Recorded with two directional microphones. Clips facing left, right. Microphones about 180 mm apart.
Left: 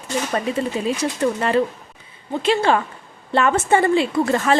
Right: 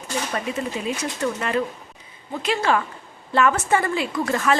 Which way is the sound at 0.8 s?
35° left (ahead or behind).